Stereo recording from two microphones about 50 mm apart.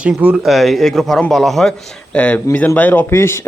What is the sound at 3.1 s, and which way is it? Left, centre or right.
Speech, left.